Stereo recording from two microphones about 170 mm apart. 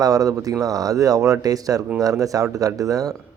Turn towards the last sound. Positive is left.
turn(degrees=-20)  # may be behind; listen again after turning